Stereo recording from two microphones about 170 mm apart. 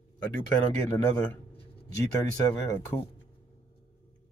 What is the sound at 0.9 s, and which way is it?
Speech, 10° left (ahead or behind).